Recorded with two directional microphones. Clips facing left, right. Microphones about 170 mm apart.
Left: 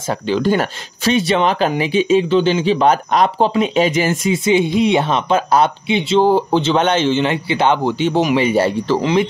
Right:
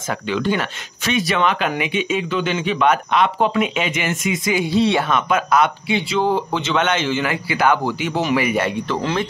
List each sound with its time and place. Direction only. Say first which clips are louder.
0.1 s speech: left 4 dB; 35° left (ahead or behind); by 5.0 s 20° left (ahead or behind)
5.0 s speech: left 3 dB; 30° left (ahead or behind)
9.0 s speech: left 7 dB; 15° left (ahead or behind)